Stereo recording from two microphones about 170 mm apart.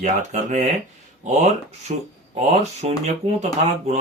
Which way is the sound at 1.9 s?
40° right (ahead or behind).